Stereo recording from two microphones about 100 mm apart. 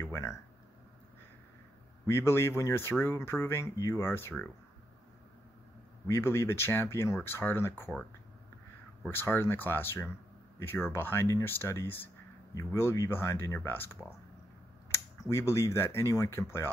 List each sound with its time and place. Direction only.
0.0 s speech: 30° left (ahead or behind)
2.0 s speech: 25° left (ahead or behind)
6.0 s speech: 25° left (ahead or behind)
9.1 s speech: 25° left (ahead or behind)